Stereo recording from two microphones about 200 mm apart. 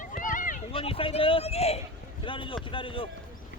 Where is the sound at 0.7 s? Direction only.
25° left (ahead or behind).